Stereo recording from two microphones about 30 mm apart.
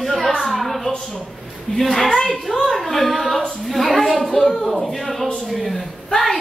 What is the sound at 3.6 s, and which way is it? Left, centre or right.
A woman's voice, centre.